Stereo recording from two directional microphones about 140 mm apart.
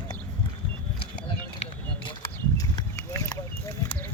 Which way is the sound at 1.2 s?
35° left (ahead or behind).